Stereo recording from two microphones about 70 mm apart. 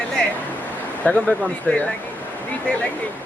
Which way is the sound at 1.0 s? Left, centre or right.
Centre.